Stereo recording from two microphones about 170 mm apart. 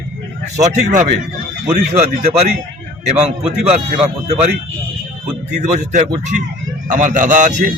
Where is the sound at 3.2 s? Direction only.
40° right (ahead or behind).